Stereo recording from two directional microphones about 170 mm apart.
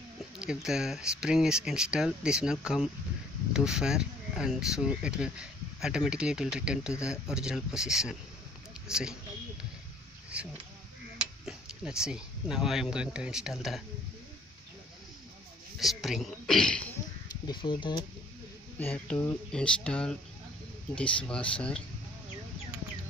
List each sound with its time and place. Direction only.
0.4 s speech: 5° right (ahead or behind)
10.3 s speech: 5° right (ahead or behind)
15.8 s speech: centre (ahead or behind)
17.5 s speech: 30° left (ahead or behind)
18.8 s speech: 10° left (ahead or behind)